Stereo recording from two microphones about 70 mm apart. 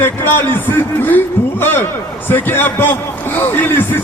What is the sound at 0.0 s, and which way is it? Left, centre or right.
Speech, left.